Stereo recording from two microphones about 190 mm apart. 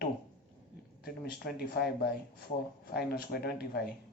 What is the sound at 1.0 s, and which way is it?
Speech, 55° left (ahead or behind).